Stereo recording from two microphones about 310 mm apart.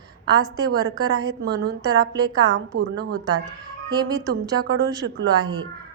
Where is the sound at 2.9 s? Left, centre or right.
Right.